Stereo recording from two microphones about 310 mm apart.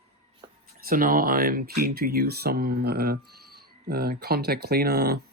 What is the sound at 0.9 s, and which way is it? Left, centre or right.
Speech, right.